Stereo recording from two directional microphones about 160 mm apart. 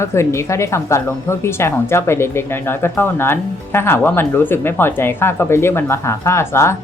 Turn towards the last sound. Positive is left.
turn(degrees=15)  # may be behind; listen again after turning